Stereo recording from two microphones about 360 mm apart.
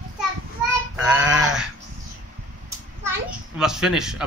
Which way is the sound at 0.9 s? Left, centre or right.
Centre.